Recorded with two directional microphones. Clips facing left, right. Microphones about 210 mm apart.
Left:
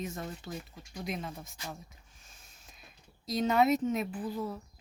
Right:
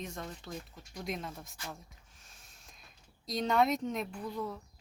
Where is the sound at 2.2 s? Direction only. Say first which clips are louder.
Even; centre (ahead or behind).